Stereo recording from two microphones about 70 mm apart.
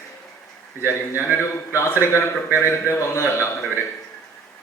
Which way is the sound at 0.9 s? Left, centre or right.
Left.